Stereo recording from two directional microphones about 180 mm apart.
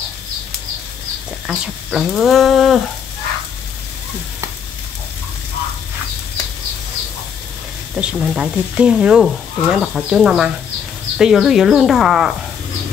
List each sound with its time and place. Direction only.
1.5 s speech: centre (ahead or behind)
7.9 s speech: 5° right (ahead or behind)